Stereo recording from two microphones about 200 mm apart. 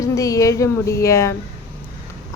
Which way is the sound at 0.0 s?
15° left (ahead or behind).